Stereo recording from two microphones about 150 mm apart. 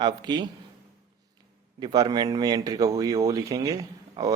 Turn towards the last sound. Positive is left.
turn(degrees=-25)  # may be behind; listen again after turning